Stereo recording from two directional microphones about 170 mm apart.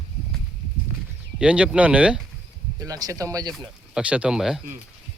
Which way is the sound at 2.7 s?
20° right (ahead or behind).